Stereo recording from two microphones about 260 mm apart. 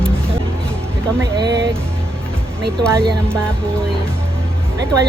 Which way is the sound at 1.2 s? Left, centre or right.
Centre.